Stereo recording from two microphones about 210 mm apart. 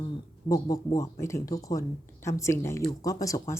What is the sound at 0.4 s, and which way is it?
Speech, 15° left (ahead or behind).